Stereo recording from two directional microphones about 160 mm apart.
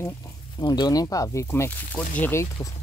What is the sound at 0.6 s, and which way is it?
Speech, 25° left (ahead or behind).